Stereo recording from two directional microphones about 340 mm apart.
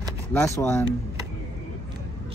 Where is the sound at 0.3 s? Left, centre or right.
Centre.